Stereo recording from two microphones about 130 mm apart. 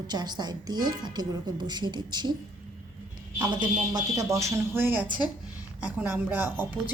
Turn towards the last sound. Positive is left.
turn(degrees=-10)  # may be behind; listen again after turning